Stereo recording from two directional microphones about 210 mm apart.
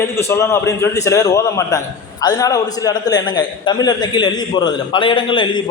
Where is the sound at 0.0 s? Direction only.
10° left (ahead or behind).